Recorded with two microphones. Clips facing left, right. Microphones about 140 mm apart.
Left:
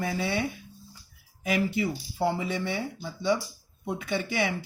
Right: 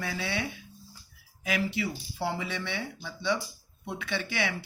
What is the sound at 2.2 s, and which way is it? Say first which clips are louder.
Speech: left 5 dB; 40° left (ahead or behind).